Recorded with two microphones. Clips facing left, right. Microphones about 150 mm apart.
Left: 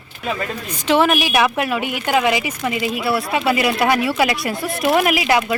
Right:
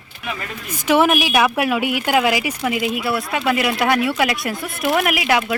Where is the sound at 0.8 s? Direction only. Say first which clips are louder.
Even; 10° right (ahead or behind).